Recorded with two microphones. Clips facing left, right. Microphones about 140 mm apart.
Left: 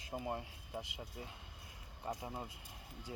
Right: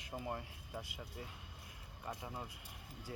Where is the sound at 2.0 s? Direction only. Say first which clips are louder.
Left 3 dB; 25° left (ahead or behind).